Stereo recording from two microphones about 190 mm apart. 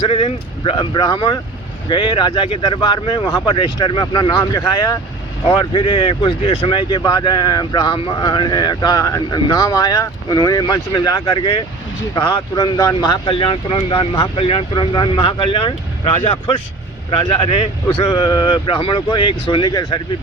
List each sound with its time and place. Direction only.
0.0 s speech: 30° left (ahead or behind)